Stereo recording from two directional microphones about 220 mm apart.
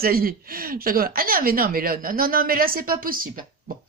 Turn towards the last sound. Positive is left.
turn(degrees=-40)  # may be behind; listen again after turning